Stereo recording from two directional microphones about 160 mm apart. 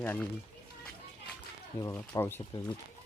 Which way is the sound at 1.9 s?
15° left (ahead or behind).